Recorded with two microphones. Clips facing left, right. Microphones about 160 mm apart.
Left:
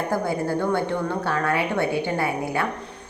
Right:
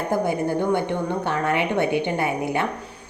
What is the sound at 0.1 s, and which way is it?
A woman's voice, 20° right (ahead or behind).